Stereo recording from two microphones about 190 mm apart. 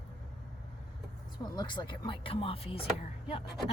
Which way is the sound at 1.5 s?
25° left (ahead or behind).